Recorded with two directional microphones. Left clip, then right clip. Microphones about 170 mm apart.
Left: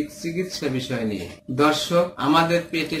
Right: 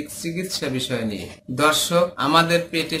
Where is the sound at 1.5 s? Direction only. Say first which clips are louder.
Right 1 dB; 25° right (ahead or behind).